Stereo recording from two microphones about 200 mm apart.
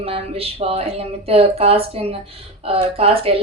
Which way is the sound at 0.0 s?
30° right (ahead or behind).